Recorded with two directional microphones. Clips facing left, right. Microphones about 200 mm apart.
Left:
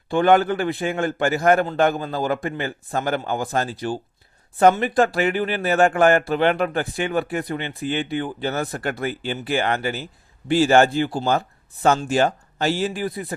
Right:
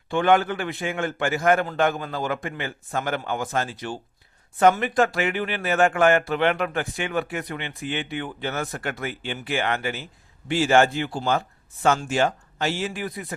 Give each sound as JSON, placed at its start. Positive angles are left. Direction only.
{"t": 0.1, "sound": "a man's voice", "side_deg": 40}